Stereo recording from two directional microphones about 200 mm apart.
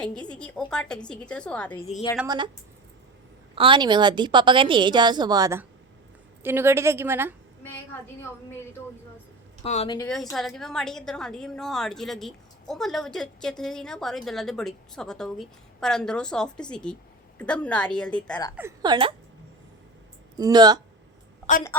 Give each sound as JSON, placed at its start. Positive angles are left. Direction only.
{"t": 0.0, "sound": "a woman's voice", "side_deg": 5}
{"t": 2.2, "sound": "a woman's voice", "side_deg": -20}
{"t": 3.5, "sound": "a woman's voice", "side_deg": -25}
{"t": 9.6, "sound": "speech", "side_deg": 35}
{"t": 10.3, "sound": "a woman's voice", "side_deg": 0}
{"t": 18.8, "sound": "a woman's voice", "side_deg": -25}
{"t": 20.3, "sound": "a woman's voice", "side_deg": -20}